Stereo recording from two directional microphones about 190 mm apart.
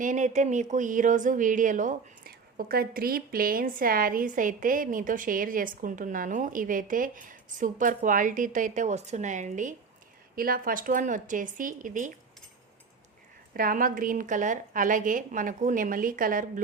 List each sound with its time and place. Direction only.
0.0 s speech: 40° right (ahead or behind)
13.5 s speech: 50° right (ahead or behind)